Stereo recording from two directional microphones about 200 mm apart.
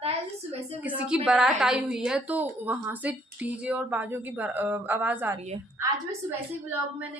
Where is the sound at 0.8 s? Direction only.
5° right (ahead or behind).